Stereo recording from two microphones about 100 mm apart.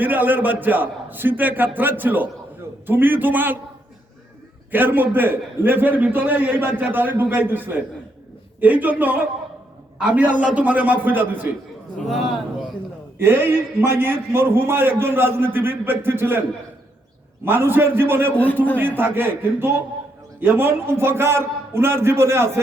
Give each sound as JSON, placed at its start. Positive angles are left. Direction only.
{"t": 0.0, "sound": "a man's voice", "side_deg": -20}
{"t": 4.7, "sound": "a man's voice", "side_deg": -20}
{"t": 13.1, "sound": "a man's voice", "side_deg": -20}
{"t": 17.4, "sound": "a man's voice", "side_deg": -20}